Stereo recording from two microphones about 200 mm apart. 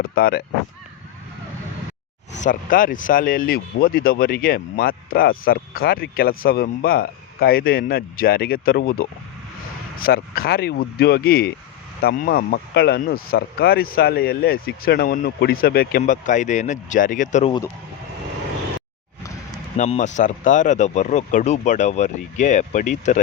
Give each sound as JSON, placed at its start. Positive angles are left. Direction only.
{"t": 0.1, "sound": "speech", "side_deg": 50}
{"t": 2.4, "sound": "speech", "side_deg": 40}
{"t": 19.7, "sound": "speech", "side_deg": 35}